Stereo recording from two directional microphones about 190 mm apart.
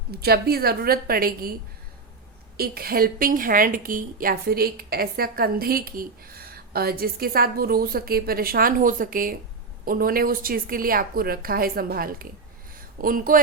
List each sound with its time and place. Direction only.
0.1 s a woman's voice: 55° right (ahead or behind)
2.6 s a woman's voice: 50° right (ahead or behind)